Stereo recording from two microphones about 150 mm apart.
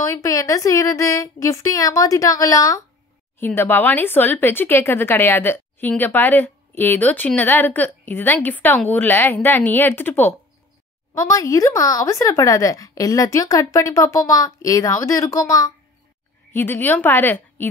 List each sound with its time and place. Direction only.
0.0 s speech: 20° left (ahead or behind)